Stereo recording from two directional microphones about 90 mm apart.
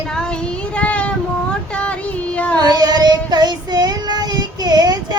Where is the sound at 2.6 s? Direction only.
50° right (ahead or behind).